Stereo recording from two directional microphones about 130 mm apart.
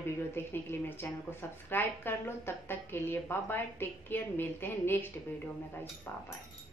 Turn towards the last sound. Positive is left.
turn(degrees=15)  # may be behind; listen again after turning